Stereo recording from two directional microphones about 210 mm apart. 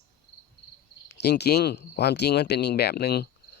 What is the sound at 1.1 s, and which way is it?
Speech, 50° left (ahead or behind).